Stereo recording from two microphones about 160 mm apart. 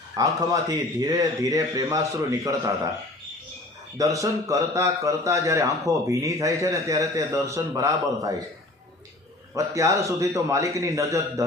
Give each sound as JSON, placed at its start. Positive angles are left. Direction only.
{"t": 0.2, "sound": "speech", "side_deg": -25}
{"t": 3.9, "sound": "speech", "side_deg": -20}
{"t": 9.6, "sound": "speech", "side_deg": -20}